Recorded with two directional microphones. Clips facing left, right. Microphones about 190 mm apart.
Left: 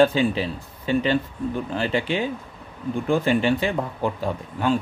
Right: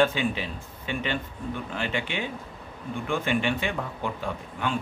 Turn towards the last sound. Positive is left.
turn(degrees=35)  # may be behind; listen again after turning